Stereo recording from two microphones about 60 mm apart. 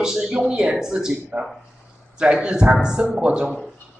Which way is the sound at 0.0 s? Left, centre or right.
Centre.